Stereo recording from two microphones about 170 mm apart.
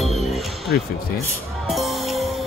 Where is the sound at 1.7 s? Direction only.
Centre (ahead or behind).